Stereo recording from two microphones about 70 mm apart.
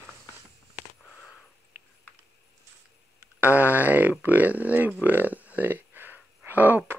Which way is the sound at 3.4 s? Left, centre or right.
Right.